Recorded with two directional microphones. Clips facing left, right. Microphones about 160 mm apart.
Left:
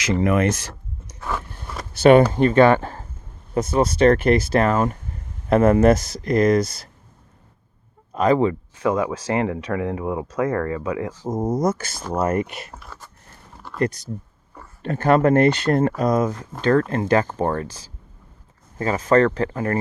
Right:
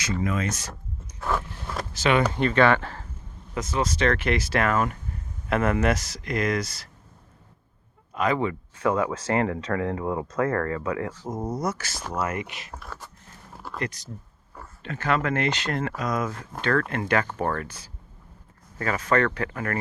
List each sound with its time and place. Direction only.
0.1 s speech: 70° left (ahead or behind)
1.2 s biting: centre (ahead or behind)
2.0 s speech: 45° left (ahead or behind)
4.5 s speech: 30° left (ahead or behind); by 6.8 s 45° left (ahead or behind)
8.1 s speech: 40° left (ahead or behind)
8.8 s speech: 15° left (ahead or behind)
11.5 s speech: 45° left (ahead or behind)
13.7 s a sound: centre (ahead or behind)
14.8 s speech: 50° left (ahead or behind)
16.0 s speech: 30° left (ahead or behind)
17.4 s speech: 20° left (ahead or behind)
18.8 s speech: 25° left (ahead or behind)